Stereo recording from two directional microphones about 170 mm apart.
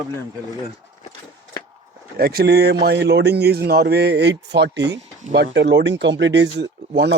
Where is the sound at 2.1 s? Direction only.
65° right (ahead or behind).